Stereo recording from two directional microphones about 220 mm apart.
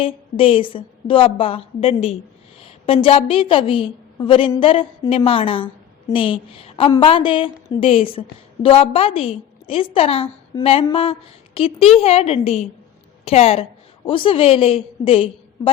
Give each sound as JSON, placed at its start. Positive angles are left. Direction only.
{"t": 0.0, "sound": "a woman's voice", "side_deg": 25}